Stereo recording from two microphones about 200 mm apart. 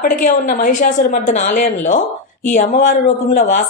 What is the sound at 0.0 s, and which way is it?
Speech, 40° left (ahead or behind).